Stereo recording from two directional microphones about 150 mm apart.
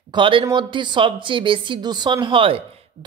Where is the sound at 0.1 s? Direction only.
35° right (ahead or behind).